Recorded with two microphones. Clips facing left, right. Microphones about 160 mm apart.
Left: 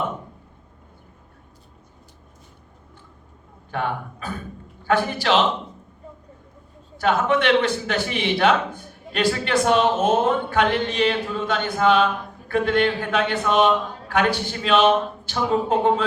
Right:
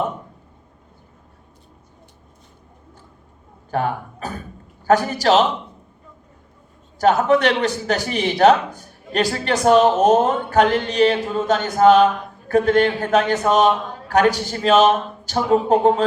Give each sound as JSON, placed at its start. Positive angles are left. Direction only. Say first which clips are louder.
{"t": 3.7, "sound": "a man's voice", "louder": "right 4 dB", "side_deg": -40}
{"t": 6.9, "sound": "a man's voice", "louder": "right 5 dB", "side_deg": -40}